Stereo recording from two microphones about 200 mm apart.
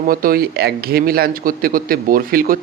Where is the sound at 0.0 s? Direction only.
45° right (ahead or behind).